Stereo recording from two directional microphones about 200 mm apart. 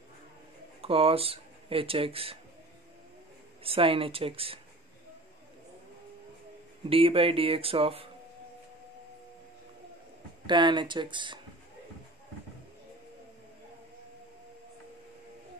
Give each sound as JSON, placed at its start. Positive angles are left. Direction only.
{"t": 0.7, "sound": "speech", "side_deg": -30}
{"t": 3.6, "sound": "speech", "side_deg": -25}
{"t": 6.9, "sound": "speech", "side_deg": -25}
{"t": 10.4, "sound": "speech", "side_deg": -25}